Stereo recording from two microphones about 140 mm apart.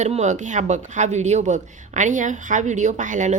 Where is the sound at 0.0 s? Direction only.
55° right (ahead or behind).